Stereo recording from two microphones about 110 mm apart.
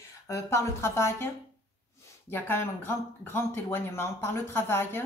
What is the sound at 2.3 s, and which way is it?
A woman's voice, 20° left (ahead or behind).